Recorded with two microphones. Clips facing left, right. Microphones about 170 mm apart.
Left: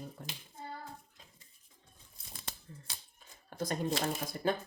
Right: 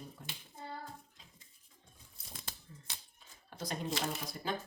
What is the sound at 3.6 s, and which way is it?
Speech, 50° left (ahead or behind).